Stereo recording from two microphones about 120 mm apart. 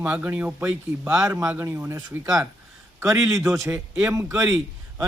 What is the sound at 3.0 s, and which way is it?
A man's voice, 25° right (ahead or behind).